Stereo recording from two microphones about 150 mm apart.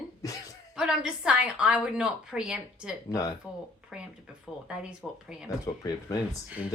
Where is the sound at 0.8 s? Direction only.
5° right (ahead or behind).